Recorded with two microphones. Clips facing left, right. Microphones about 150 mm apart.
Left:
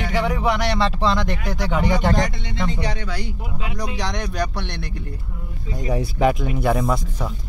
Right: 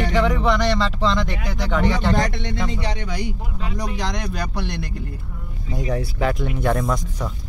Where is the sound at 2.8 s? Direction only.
20° right (ahead or behind).